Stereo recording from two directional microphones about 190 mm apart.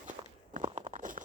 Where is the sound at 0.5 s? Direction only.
40° right (ahead or behind).